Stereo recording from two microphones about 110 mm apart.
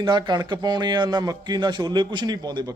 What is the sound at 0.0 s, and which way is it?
A man's voice, 40° right (ahead or behind).